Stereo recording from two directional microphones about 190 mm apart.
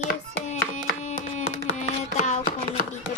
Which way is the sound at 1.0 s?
40° left (ahead or behind).